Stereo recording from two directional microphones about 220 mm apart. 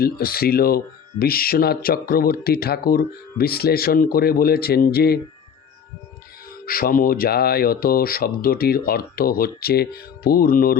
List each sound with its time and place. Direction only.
0.0 s speech: 45° left (ahead or behind)
6.7 s speech: 40° left (ahead or behind)